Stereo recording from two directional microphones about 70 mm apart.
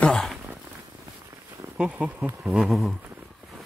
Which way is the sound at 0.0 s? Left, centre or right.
Centre.